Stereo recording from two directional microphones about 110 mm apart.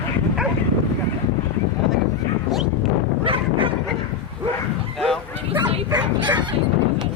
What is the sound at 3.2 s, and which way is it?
Bow-wow, 55° right (ahead or behind).